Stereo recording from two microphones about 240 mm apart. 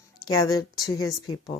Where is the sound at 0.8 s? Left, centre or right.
Centre.